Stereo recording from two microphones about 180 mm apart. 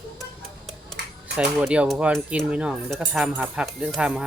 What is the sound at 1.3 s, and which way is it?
Speech, 5° right (ahead or behind).